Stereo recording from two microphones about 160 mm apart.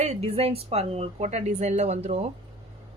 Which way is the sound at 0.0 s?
45° right (ahead or behind).